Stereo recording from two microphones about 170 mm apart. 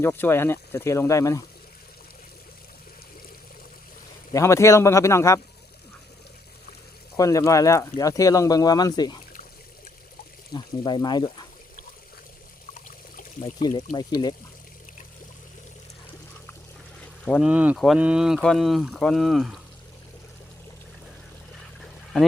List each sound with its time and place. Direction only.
0.0 s speech: 15° left (ahead or behind)
4.3 s speech: 15° left (ahead or behind)
7.2 s speech: 20° left (ahead or behind)
10.5 s speech: 25° left (ahead or behind)
13.6 s speech: 25° left (ahead or behind)
17.2 s speech: 5° left (ahead or behind)
17.5 s speech: 10° right (ahead or behind)
21.8 s boat: centre (ahead or behind)